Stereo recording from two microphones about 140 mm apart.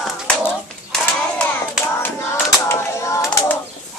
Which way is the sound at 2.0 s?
20° left (ahead or behind).